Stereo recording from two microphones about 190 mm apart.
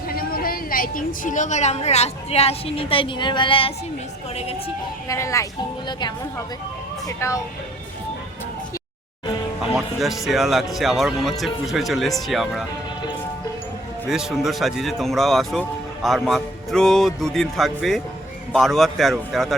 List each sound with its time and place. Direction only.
0.1 s a woman's voice: 50° left (ahead or behind); by 3.7 s 25° left (ahead or behind)
5.0 s speech: 15° left (ahead or behind)
7.2 s speech: 15° left (ahead or behind)
9.7 s speech: centre (ahead or behind)
14.1 s speech: centre (ahead or behind)